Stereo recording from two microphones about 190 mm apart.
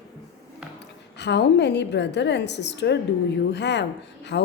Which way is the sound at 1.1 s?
65° left (ahead or behind).